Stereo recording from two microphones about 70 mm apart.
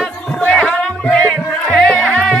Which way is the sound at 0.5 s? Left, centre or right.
Centre.